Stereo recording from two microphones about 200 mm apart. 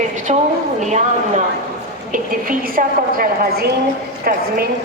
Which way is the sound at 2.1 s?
45° right (ahead or behind).